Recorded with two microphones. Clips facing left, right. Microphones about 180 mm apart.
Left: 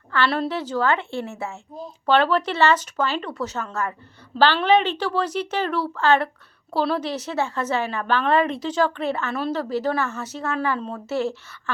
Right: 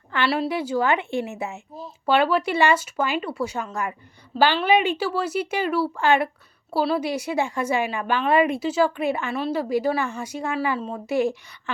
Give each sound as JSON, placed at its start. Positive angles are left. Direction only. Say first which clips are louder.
{"t": 0.1, "sound": "a woman's voice", "louder": "even", "side_deg": -10}